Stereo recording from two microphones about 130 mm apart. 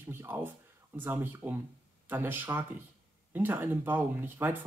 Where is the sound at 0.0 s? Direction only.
15° right (ahead or behind).